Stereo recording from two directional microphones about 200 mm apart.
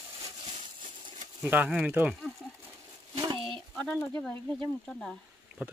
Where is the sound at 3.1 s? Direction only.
20° right (ahead or behind).